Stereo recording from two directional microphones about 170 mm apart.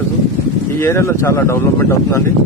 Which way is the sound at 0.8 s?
15° left (ahead or behind).